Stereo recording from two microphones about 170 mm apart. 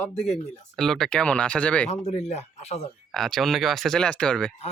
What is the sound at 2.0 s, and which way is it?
Speech, 40° left (ahead or behind).